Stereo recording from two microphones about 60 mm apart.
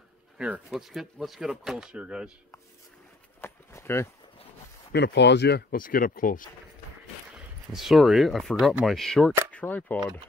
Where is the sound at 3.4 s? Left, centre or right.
Left.